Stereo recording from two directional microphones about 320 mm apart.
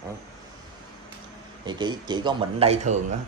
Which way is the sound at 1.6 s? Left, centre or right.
Centre.